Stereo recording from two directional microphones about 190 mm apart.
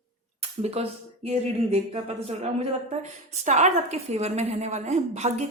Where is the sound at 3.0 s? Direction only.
40° right (ahead or behind).